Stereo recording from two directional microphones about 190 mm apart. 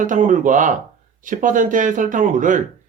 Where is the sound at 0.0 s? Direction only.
45° right (ahead or behind).